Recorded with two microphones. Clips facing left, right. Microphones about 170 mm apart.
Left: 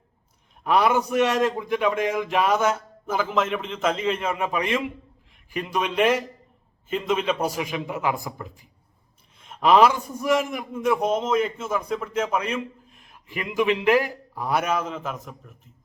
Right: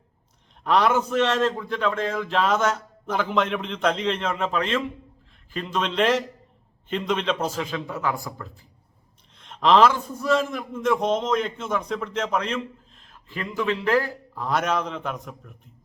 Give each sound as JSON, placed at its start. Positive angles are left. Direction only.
{"t": 0.6, "sound": "a man's voice", "side_deg": 10}